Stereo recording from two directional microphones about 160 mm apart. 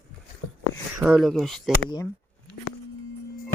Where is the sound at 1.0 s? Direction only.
10° right (ahead or behind).